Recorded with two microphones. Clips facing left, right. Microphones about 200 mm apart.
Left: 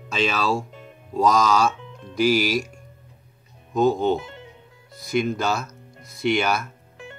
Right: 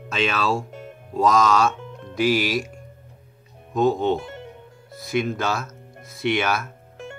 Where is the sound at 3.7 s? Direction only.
Centre (ahead or behind).